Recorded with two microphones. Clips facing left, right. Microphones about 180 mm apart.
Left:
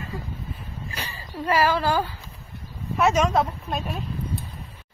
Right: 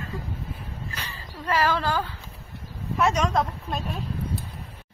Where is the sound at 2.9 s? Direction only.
5° left (ahead or behind).